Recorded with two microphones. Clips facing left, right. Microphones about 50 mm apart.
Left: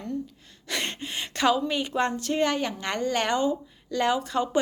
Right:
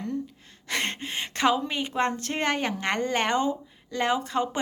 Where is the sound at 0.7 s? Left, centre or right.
Right.